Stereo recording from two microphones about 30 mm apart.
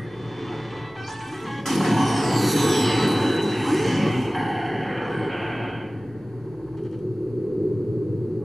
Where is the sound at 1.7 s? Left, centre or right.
Centre.